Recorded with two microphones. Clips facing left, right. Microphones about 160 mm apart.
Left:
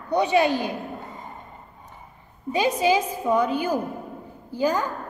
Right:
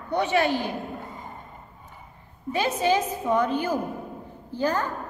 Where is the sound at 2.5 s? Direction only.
10° left (ahead or behind).